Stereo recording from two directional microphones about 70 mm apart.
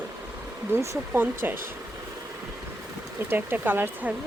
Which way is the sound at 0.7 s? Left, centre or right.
Right.